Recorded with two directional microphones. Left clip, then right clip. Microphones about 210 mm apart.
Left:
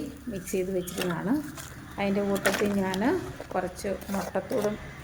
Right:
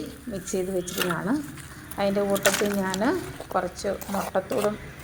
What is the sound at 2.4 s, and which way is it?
Speech, 10° left (ahead or behind).